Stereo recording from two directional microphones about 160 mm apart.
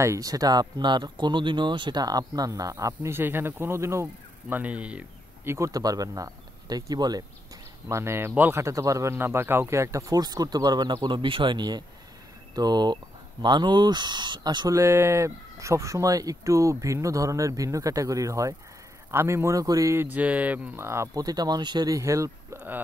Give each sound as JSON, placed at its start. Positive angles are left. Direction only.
{"t": 0.0, "sound": "speech", "side_deg": -20}